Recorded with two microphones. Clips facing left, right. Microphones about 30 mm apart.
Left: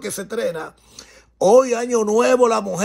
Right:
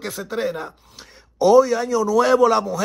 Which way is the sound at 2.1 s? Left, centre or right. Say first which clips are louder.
Even; right.